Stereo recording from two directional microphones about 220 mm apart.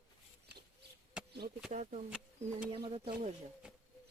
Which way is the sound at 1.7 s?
30° right (ahead or behind).